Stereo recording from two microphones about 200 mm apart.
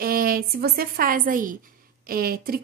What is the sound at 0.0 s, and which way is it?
A woman's voice, 45° right (ahead or behind).